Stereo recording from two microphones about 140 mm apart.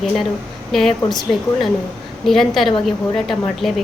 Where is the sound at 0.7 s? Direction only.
Centre (ahead or behind).